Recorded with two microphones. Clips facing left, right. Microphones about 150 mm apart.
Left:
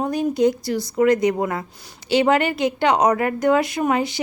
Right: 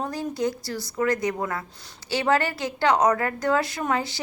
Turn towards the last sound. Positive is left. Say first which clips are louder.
# left 6 dB
turn(degrees=15)  # may be behind; listen again after turning